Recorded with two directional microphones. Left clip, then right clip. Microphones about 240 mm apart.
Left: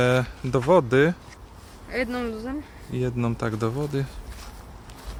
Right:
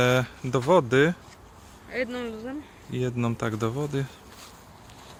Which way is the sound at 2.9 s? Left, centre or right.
Centre.